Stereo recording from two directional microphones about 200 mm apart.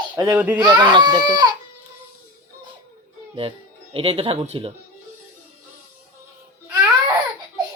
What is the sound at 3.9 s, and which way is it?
Speech, 30° right (ahead or behind).